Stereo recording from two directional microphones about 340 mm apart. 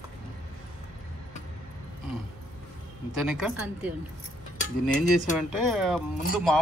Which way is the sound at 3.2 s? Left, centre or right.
Centre.